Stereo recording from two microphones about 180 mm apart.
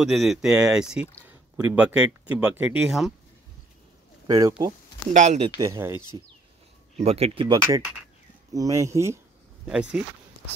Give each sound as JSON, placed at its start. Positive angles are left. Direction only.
{"t": 0.0, "sound": "speech", "side_deg": 0}
{"t": 4.3, "sound": "speech", "side_deg": -20}
{"t": 5.1, "sound": "speech", "side_deg": -40}
{"t": 5.6, "sound": "speech", "side_deg": -15}
{"t": 7.0, "sound": "speech", "side_deg": -35}
{"t": 8.5, "sound": "speech", "side_deg": -20}
{"t": 9.7, "sound": "speech", "side_deg": -5}